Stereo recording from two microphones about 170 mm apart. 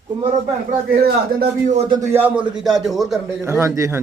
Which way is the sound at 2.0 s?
10° right (ahead or behind).